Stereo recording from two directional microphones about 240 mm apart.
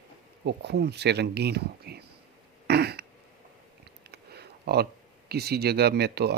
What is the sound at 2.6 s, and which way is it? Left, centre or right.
Throat clearing, right.